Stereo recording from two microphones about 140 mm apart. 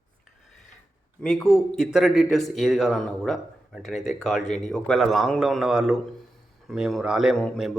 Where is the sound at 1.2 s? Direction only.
5° left (ahead or behind).